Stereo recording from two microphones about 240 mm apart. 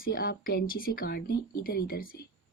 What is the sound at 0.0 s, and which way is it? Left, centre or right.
Speech, left.